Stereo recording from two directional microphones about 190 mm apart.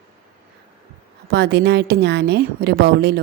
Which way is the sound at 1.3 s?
65° right (ahead or behind).